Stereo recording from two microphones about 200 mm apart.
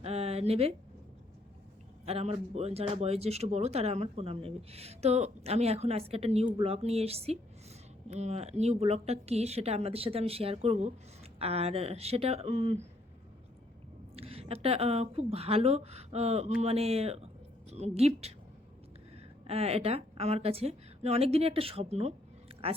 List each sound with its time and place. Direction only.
0.0 s a sound: 30° right (ahead or behind)
2.0 s speech: 30° right (ahead or behind)
14.2 s speech: 30° right (ahead or behind)
19.5 s speech: 30° right (ahead or behind)